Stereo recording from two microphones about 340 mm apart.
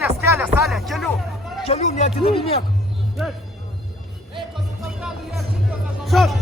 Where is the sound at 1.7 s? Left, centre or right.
Centre.